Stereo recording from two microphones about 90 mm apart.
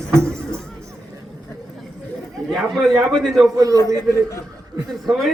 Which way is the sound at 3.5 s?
40° right (ahead or behind).